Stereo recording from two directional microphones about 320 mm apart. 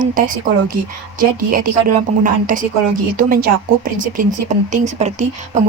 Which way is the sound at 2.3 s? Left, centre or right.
Right.